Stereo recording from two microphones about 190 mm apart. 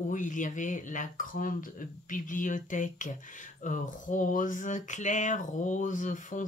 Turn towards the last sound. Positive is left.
turn(degrees=40)  # may be behind; listen again after turning